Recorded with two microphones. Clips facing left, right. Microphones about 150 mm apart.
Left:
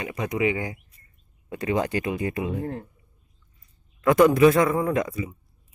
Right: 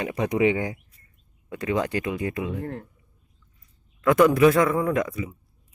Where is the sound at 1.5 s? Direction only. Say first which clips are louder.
Even; 25° left (ahead or behind).